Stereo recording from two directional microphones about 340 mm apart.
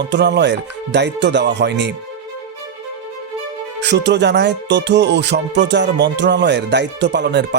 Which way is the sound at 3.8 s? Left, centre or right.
Right.